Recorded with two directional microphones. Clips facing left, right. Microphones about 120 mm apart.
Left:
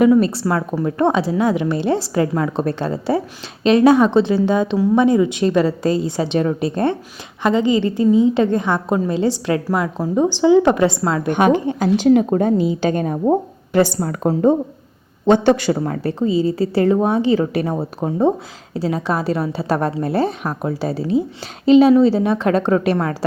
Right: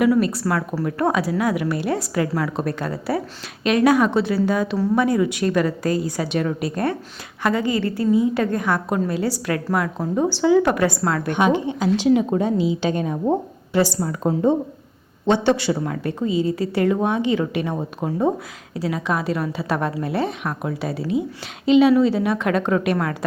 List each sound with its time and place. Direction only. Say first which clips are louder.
0.0 s a woman's voice: left 4 dB; 30° left (ahead or behind)
11.3 s a woman's voice: left 4 dB; 50° left (ahead or behind)
15.8 s a woman's voice: left 4 dB; 35° left (ahead or behind)